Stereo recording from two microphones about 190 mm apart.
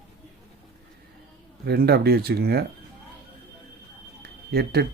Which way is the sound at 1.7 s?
60° right (ahead or behind).